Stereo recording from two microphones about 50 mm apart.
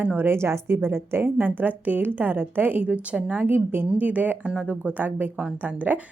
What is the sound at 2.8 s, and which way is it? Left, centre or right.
Speech, right.